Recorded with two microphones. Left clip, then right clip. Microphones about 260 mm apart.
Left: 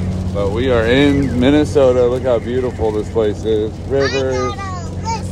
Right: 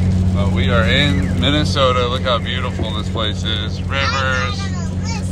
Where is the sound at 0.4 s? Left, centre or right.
Left.